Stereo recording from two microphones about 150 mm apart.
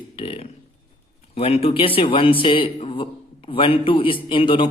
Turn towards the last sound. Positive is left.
turn(degrees=35)  # may be behind; listen again after turning